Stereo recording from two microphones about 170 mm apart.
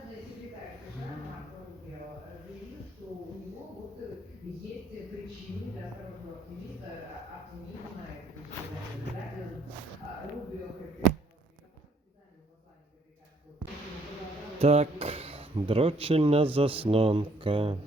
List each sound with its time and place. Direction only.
14.6 s speech: 40° right (ahead or behind)